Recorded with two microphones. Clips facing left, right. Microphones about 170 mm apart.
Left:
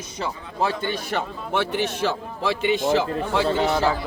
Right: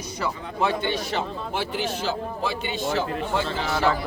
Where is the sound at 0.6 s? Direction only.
45° left (ahead or behind); by 2.1 s 65° left (ahead or behind).